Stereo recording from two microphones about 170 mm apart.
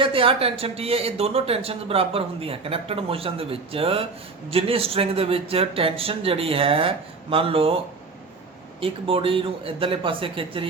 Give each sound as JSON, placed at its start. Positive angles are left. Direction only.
{"t": 0.0, "sound": "speech", "side_deg": -30}
{"t": 8.8, "sound": "speech", "side_deg": -30}